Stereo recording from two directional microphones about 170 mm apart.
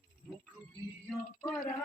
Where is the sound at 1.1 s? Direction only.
5° left (ahead or behind).